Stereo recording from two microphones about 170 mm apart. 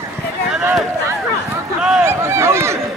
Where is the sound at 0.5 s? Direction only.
5° right (ahead or behind).